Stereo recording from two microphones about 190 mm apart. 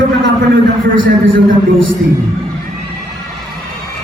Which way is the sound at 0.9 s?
85° right.